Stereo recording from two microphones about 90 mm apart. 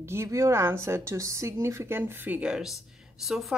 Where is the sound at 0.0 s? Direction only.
30° right (ahead or behind).